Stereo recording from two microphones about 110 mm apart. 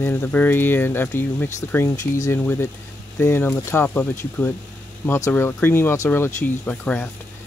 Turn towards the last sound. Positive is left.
turn(degrees=15)  # may be behind; listen again after turning